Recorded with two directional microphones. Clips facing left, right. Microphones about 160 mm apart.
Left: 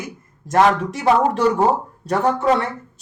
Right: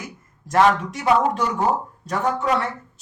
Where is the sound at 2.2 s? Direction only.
30° left (ahead or behind).